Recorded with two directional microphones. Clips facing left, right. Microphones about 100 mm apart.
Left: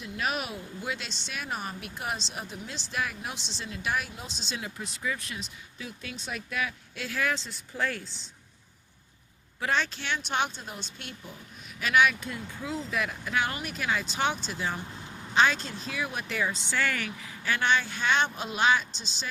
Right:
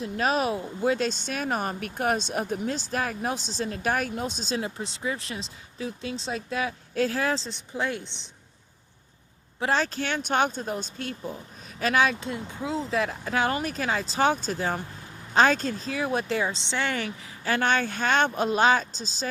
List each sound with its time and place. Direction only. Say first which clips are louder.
0.0 s speech: right 7 dB; 35° right (ahead or behind); by 8.3 s 20° right (ahead or behind)
9.6 s speech: right 4 dB; 35° right (ahead or behind)